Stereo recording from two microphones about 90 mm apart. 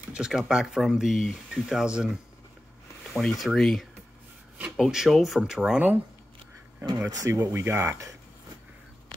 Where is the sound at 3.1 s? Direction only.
Centre (ahead or behind).